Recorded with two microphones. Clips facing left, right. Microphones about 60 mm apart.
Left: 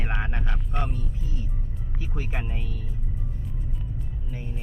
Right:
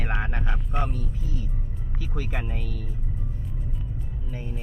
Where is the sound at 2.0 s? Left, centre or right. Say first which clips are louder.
Right 2 dB; left.